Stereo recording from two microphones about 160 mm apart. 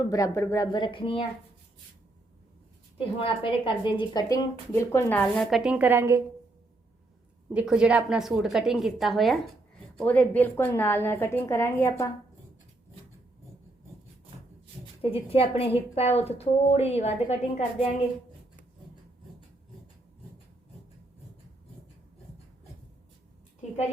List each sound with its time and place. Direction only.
0.0 s a woman's voice: 20° left (ahead or behind)
3.0 s a woman's voice: 35° left (ahead or behind); by 5.2 s 15° left (ahead or behind)
5.2 s a woman's voice: centre (ahead or behind); by 6.2 s 15° right (ahead or behind)
7.5 s a woman's voice: 5° right (ahead or behind); by 12.1 s 20° left (ahead or behind)
15.0 s a woman's voice: 35° left (ahead or behind)